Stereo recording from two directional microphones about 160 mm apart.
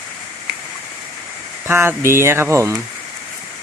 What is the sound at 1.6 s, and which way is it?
Speech, 15° right (ahead or behind).